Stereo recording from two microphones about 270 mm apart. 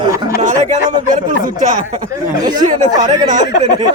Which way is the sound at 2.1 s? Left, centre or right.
Centre.